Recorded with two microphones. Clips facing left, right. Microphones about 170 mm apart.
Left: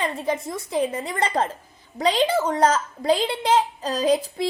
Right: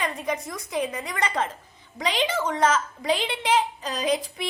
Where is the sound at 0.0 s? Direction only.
30° left (ahead or behind).